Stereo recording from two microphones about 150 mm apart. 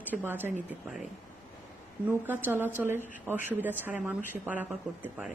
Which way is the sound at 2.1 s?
15° right (ahead or behind).